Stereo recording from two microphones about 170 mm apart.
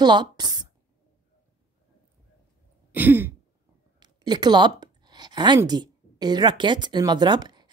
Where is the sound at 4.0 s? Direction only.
25° right (ahead or behind).